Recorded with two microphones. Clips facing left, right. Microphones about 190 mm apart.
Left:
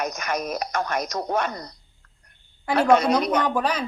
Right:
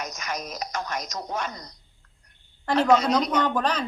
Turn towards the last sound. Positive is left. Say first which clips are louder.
# left 1 dB
turn(degrees=10)  # may be behind; listen again after turning